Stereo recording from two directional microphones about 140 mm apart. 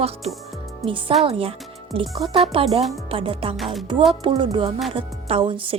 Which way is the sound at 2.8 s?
Centre (ahead or behind).